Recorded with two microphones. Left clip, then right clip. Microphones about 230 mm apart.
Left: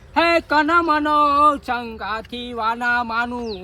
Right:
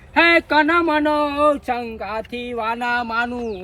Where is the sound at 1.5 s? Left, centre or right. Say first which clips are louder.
Right 1 dB; left.